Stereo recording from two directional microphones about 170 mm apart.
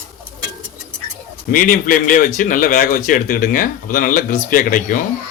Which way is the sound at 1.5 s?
50° left (ahead or behind).